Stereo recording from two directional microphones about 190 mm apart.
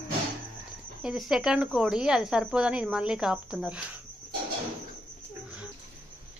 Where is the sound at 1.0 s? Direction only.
Centre (ahead or behind).